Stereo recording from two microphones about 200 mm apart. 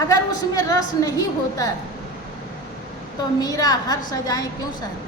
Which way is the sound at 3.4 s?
20° left (ahead or behind).